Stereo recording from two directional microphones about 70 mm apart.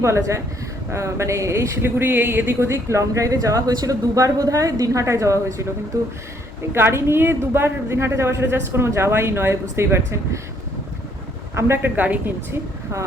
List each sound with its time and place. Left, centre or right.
0.0 s speech: right
6.7 s a woman's voice: right
11.8 s speech: right